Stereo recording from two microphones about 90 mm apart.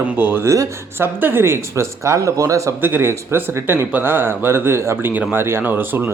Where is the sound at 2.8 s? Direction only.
25° right (ahead or behind).